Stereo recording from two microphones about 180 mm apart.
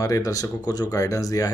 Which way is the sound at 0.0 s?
20° left (ahead or behind).